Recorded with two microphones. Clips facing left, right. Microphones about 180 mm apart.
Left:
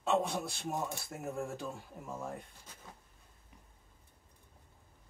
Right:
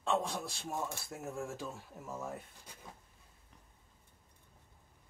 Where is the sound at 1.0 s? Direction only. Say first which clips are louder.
Left 2 dB; centre (ahead or behind).